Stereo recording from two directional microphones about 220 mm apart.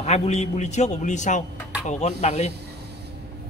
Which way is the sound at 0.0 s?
30° left (ahead or behind).